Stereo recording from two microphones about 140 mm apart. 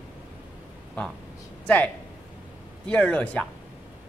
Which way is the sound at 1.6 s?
10° left (ahead or behind).